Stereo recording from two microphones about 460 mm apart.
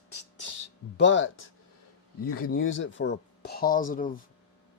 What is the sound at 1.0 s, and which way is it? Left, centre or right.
Speech, left.